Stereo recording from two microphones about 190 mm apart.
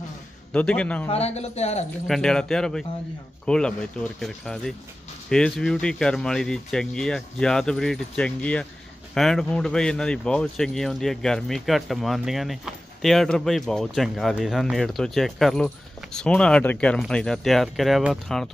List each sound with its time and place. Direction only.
0.5 s speech: 5° left (ahead or behind)
1.0 s speech: 35° left (ahead or behind)
2.0 s speech: centre (ahead or behind)